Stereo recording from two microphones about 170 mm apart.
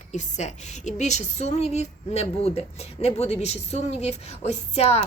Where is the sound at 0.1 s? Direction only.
45° left (ahead or behind).